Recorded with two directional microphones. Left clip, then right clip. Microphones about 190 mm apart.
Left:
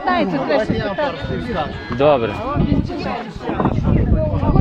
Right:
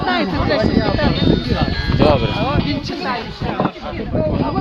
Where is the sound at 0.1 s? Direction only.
25° left (ahead or behind).